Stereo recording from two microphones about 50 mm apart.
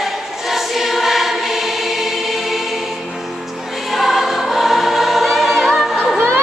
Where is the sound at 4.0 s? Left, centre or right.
Centre.